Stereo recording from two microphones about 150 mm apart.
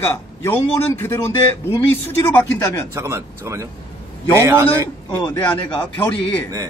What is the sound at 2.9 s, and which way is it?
Speech, 20° right (ahead or behind).